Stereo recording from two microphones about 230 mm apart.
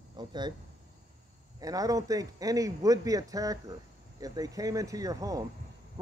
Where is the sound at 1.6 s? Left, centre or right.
Centre.